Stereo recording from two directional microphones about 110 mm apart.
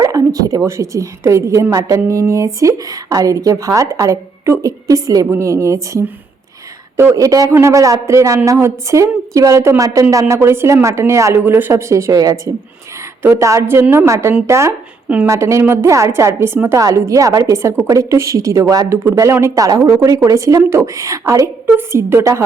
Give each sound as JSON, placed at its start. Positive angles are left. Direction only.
{"t": 0.0, "sound": "bow-wow", "side_deg": -35}
{"t": 0.6, "sound": "a woman's voice", "side_deg": -25}